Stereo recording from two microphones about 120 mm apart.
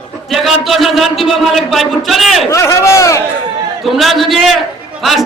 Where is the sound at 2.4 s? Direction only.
25° left (ahead or behind).